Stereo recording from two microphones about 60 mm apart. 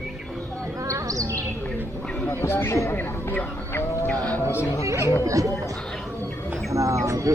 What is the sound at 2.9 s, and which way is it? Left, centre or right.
Music, left.